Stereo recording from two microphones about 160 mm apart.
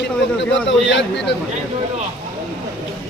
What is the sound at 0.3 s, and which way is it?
Speech, 90° left.